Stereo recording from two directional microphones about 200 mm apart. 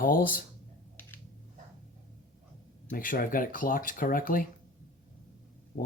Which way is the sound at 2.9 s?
45° left (ahead or behind).